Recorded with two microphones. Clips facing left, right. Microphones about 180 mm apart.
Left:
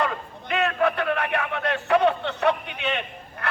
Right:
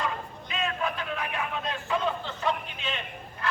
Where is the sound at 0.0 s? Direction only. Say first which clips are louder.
Left 5 dB; 65° left (ahead or behind).